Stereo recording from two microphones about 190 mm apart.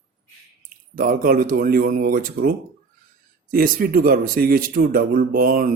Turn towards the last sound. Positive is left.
turn(degrees=-45)  # may be behind; listen again after turning